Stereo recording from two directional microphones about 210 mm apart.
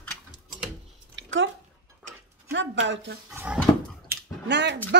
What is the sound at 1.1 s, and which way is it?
Drip, 65° right (ahead or behind).